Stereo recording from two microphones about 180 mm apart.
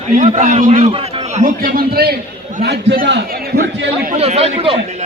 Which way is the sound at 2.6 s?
70° right (ahead or behind).